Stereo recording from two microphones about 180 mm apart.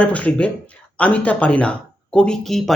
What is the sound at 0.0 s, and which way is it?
Speech, 5° left (ahead or behind).